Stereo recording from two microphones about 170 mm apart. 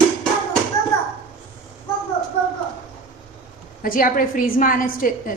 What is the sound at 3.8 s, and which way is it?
A woman's voice, 55° left (ahead or behind).